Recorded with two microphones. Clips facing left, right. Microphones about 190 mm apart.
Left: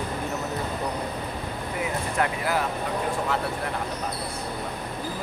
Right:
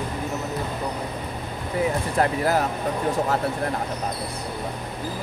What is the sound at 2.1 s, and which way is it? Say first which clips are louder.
Speech: right 4 dB; 40° right (ahead or behind).